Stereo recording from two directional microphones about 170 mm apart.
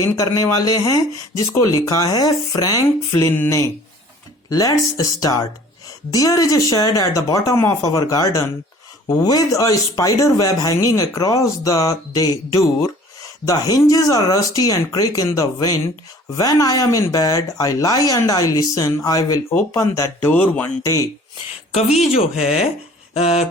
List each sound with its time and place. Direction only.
0.0 s speech: 20° left (ahead or behind)
21.7 s speech: 40° left (ahead or behind)